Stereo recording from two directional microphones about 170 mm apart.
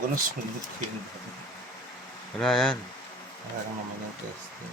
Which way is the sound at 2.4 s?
5° left (ahead or behind).